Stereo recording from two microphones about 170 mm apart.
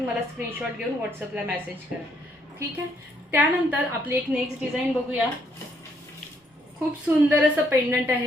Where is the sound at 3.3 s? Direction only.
10° right (ahead or behind).